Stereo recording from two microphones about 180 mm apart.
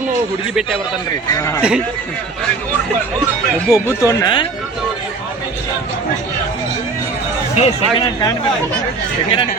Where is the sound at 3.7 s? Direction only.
15° left (ahead or behind).